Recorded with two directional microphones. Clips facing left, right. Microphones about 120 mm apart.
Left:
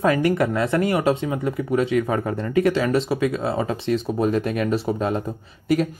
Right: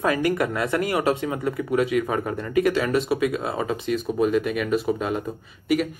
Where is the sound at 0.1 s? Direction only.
25° left (ahead or behind).